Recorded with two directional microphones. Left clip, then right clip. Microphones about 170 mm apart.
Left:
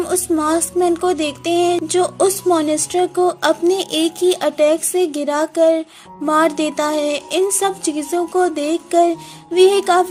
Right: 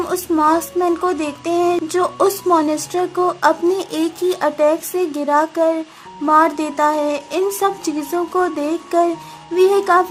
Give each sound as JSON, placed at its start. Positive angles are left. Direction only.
{"t": 0.0, "sound": "a woman's voice", "side_deg": 25}